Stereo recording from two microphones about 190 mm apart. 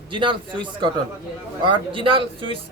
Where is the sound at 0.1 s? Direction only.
25° right (ahead or behind).